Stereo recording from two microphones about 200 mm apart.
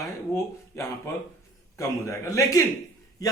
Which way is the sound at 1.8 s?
15° left (ahead or behind).